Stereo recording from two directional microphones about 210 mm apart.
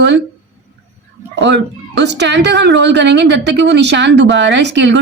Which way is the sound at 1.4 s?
55° right (ahead or behind).